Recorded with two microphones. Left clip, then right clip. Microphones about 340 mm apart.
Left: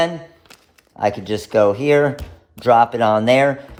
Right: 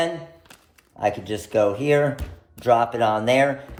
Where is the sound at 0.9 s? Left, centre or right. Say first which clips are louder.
Left 4 dB; left.